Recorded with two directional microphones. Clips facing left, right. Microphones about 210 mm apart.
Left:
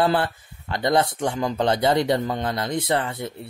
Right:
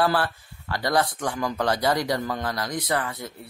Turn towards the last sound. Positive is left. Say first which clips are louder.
# left 3 dB
turn(degrees=25)  # may be behind; listen again after turning